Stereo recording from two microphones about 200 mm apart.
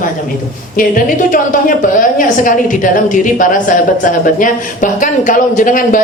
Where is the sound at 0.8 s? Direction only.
45° left (ahead or behind).